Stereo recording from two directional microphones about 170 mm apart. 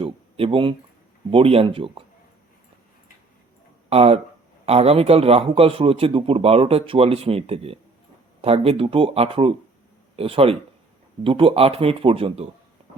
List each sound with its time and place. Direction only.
0.0 s a man's voice: 35° right (ahead or behind)
3.8 s a man's voice: 35° right (ahead or behind)